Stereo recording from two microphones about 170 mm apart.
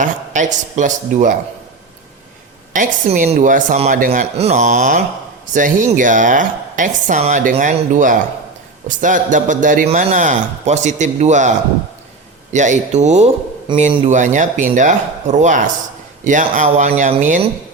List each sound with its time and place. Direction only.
0.0 s a man's voice: 45° right (ahead or behind)
2.7 s a man's voice: 45° right (ahead or behind)
13.7 s a man's voice: 30° right (ahead or behind)
14.1 s a man's voice: 45° right (ahead or behind)